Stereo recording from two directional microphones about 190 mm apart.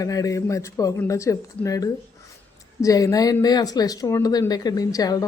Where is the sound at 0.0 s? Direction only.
15° left (ahead or behind).